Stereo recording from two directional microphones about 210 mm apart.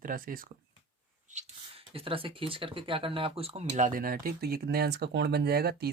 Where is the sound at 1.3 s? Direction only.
35° right (ahead or behind).